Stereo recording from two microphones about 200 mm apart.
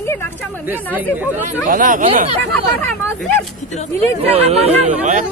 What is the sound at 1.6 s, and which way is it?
Speech, 40° right (ahead or behind).